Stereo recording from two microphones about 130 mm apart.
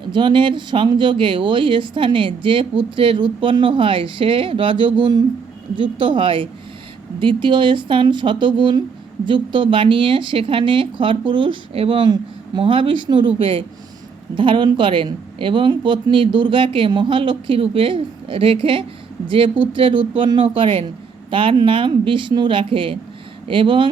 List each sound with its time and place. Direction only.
0.1 s speech: 35° right (ahead or behind)